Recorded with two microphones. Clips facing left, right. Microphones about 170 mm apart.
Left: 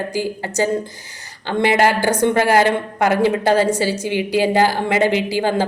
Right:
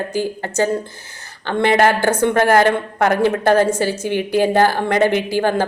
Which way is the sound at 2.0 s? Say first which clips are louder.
Even; 15° left (ahead or behind).